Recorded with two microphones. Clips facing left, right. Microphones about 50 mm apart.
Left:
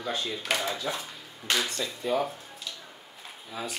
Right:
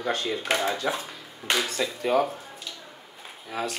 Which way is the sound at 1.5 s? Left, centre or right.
Centre.